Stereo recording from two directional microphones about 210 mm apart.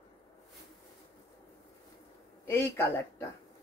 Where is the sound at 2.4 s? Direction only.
10° left (ahead or behind).